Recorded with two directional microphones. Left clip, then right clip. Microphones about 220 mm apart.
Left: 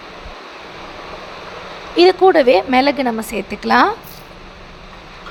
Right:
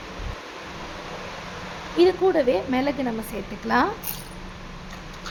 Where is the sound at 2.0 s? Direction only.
25° left (ahead or behind).